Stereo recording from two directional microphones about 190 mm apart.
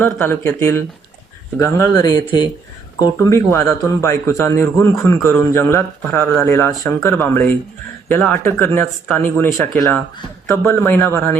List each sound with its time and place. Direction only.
0.0 s a man's voice: 10° left (ahead or behind)